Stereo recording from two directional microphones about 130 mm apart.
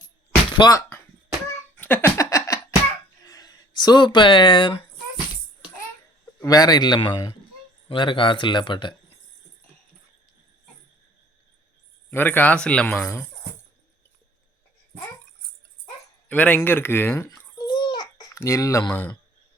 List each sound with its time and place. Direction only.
0.5 s speech: 30° left (ahead or behind)
1.7 s a sound: 15° left (ahead or behind)
3.2 s speech: 30° left (ahead or behind)
6.4 s speech: 30° left (ahead or behind)
12.1 s speech: 15° left (ahead or behind)
16.3 s speech: 10° left (ahead or behind)
17.2 s babbling: 30° left (ahead or behind)
18.3 s speech: 25° left (ahead or behind)